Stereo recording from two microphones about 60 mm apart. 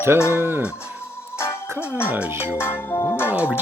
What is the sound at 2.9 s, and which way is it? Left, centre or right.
Music, left.